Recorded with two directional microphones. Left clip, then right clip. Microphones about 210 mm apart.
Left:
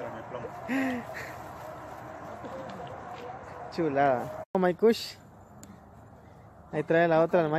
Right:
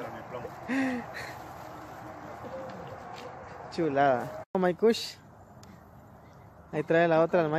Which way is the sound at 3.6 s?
5° right (ahead or behind).